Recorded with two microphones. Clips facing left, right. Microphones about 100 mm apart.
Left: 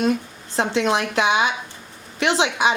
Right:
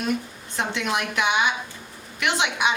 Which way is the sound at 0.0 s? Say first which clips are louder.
Left 5 dB; 30° left (ahead or behind).